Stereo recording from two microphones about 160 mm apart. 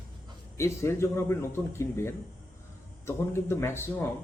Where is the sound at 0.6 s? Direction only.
15° left (ahead or behind).